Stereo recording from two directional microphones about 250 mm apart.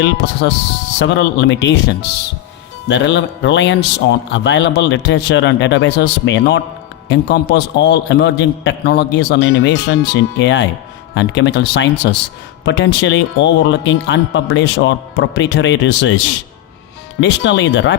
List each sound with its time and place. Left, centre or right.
0.0 s speech: left